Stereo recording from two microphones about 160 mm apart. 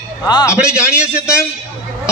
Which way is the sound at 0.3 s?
25° left (ahead or behind).